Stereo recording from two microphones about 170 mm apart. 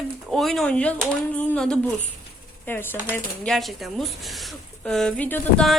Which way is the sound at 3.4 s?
Centre (ahead or behind).